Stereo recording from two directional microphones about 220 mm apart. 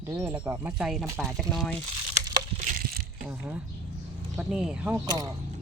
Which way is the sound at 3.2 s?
5° right (ahead or behind).